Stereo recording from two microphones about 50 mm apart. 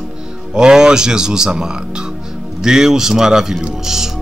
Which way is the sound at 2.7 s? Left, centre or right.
Centre.